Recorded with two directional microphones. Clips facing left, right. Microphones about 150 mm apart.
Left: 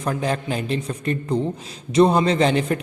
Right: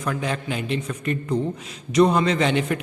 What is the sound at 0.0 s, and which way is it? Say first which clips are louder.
A man's voice: left 3 dB; 35° left (ahead or behind).